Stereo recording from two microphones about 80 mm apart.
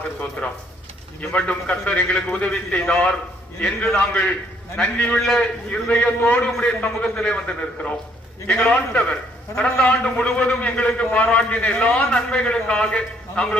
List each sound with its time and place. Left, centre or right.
0.2 s a man's voice: centre